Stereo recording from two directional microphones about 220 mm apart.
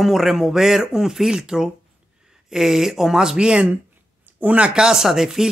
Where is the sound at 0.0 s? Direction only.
Centre (ahead or behind).